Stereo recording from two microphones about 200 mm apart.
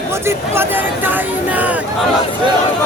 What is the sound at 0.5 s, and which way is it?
Speech, 10° right (ahead or behind).